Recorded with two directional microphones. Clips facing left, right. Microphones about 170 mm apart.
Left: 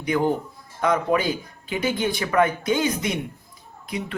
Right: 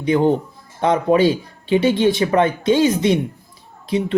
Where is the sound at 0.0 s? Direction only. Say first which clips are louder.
Right 6 dB; 25° right (ahead or behind).